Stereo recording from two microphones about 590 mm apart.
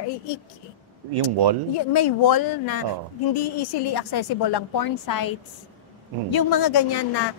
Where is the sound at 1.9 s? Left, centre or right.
Left.